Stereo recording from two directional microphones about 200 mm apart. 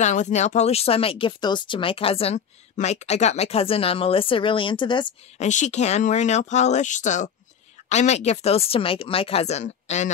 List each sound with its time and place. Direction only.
0.0 s speech: 35° left (ahead or behind)
5.4 s speech: 35° left (ahead or behind)